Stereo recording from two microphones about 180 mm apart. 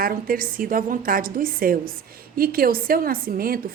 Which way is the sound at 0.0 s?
55° right (ahead or behind).